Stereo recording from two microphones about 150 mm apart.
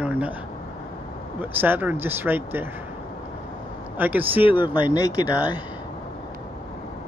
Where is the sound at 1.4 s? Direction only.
15° right (ahead or behind).